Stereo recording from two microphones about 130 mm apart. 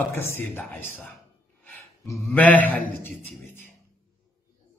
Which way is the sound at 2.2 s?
15° left (ahead or behind).